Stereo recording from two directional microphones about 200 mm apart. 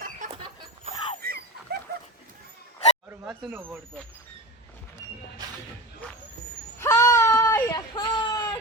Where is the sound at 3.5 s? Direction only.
10° right (ahead or behind).